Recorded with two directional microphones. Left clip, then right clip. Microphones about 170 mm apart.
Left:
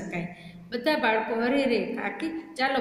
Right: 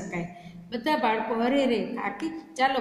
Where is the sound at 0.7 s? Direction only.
45° right (ahead or behind).